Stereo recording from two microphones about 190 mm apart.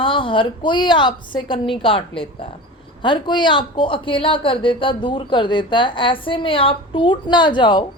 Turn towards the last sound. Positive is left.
turn(degrees=25)  # may be behind; listen again after turning